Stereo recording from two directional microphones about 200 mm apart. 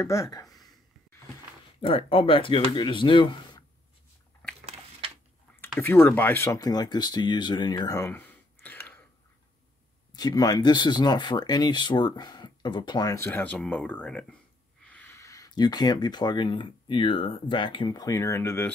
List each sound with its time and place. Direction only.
0.0 s speech: 15° left (ahead or behind)
1.8 s speech: 25° left (ahead or behind)
5.8 s speech: 10° left (ahead or behind)
10.1 s speech: 20° left (ahead or behind)